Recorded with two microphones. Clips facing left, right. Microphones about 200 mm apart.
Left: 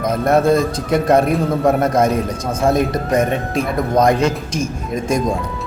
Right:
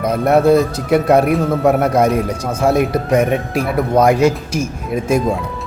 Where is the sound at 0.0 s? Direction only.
5° right (ahead or behind).